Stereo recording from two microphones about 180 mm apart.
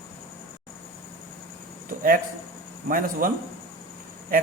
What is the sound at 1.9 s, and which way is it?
Speech, 50° right (ahead or behind).